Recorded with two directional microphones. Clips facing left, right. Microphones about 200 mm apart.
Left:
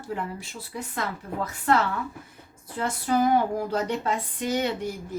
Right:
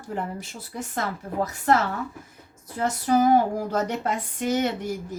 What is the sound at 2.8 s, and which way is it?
A woman's voice, 40° right (ahead or behind).